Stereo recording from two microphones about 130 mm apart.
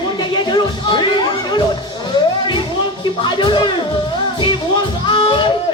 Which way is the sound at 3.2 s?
35° left (ahead or behind).